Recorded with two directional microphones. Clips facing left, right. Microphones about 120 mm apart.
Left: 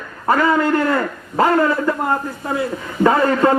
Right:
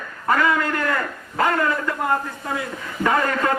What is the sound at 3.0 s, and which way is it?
Speech, 30° left (ahead or behind).